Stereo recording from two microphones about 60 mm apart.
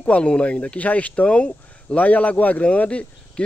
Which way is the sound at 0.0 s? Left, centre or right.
Centre.